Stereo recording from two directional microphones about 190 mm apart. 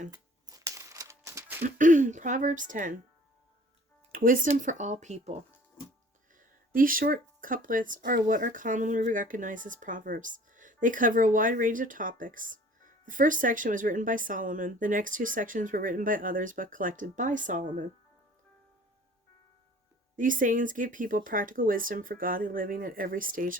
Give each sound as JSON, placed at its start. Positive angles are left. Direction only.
{"t": 0.1, "sound": "crumpling", "side_deg": -20}
{"t": 1.6, "sound": "speech", "side_deg": -40}
{"t": 4.1, "sound": "speech", "side_deg": -45}
{"t": 6.4, "sound": "speech", "side_deg": -45}
{"t": 20.1, "sound": "speech", "side_deg": -45}